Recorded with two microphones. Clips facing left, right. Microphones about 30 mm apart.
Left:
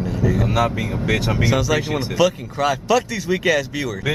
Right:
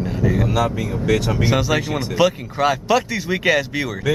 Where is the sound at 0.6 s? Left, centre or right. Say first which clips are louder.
Even; centre.